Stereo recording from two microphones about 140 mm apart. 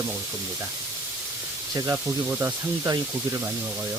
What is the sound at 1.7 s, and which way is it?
Speech, 25° right (ahead or behind).